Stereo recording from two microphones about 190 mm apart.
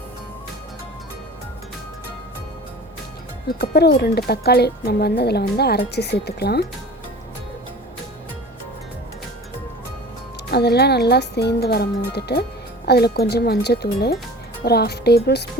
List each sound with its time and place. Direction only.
3.6 s speech: 55° left (ahead or behind)
10.5 s speech: 60° left (ahead or behind)